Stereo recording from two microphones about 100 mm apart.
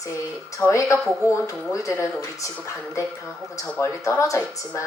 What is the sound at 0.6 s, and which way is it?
A woman's voice, 30° left (ahead or behind).